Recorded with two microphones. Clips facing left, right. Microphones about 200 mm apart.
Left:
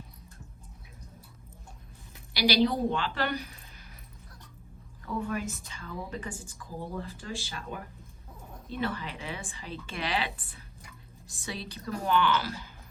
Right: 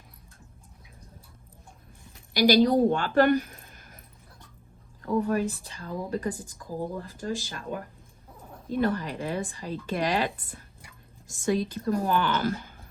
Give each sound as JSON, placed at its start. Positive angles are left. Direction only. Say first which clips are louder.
{"t": 2.3, "sound": "a woman's voice", "louder": "right 6 dB", "side_deg": -45}
{"t": 5.0, "sound": "speech", "louder": "right 7 dB", "side_deg": -40}